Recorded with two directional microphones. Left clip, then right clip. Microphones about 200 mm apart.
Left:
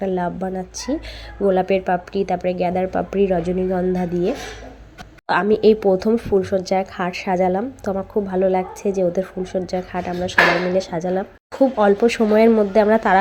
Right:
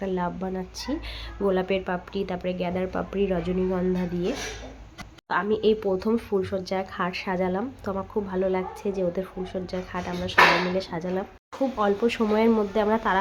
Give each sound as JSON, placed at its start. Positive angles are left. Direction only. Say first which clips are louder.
{"t": 0.0, "sound": "speech", "louder": "left 6 dB", "side_deg": 10}
{"t": 5.3, "sound": "speech", "louder": "left 8 dB", "side_deg": 25}